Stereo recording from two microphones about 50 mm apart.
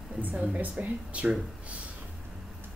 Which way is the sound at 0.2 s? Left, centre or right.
Right.